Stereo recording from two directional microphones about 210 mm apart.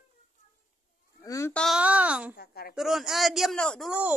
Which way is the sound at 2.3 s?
45° left (ahead or behind).